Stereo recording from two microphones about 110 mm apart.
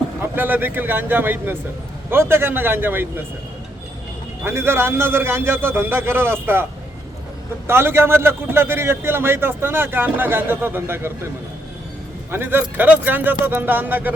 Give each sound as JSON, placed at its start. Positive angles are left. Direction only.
{"t": 0.2, "sound": "a man's voice", "side_deg": -15}
{"t": 4.4, "sound": "a man's voice", "side_deg": -20}
{"t": 7.7, "sound": "a man's voice", "side_deg": -20}
{"t": 12.3, "sound": "speech", "side_deg": -20}